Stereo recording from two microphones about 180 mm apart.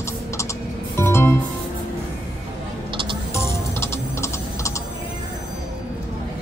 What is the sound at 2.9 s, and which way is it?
Music, 25° right (ahead or behind).